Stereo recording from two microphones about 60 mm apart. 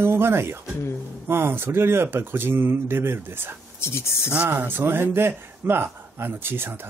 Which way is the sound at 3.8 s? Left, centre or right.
Left.